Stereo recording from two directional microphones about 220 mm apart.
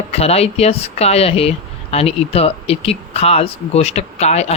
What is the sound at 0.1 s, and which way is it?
Speech, 30° left (ahead or behind).